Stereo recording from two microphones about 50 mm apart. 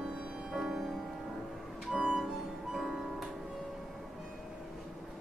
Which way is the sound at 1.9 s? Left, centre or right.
Right.